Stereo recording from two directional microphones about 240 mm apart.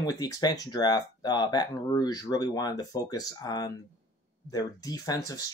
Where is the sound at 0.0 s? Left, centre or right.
Centre.